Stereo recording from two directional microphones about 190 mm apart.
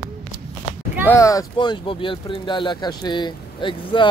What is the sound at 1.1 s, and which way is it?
Speech, 15° left (ahead or behind).